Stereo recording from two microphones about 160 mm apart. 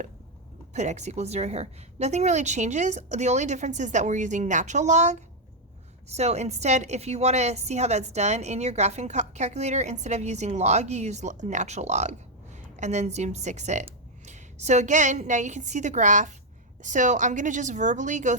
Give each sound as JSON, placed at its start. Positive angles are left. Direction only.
{"t": 0.7, "sound": "a woman's voice", "side_deg": -45}